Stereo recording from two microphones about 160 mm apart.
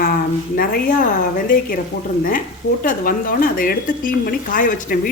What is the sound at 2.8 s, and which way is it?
Speech, 60° left (ahead or behind).